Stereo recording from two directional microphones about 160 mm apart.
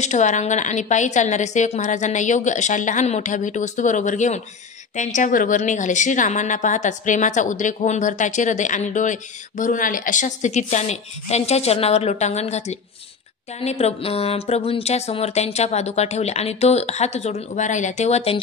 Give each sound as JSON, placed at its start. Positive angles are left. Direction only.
{"t": 0.0, "sound": "a woman's voice", "side_deg": 45}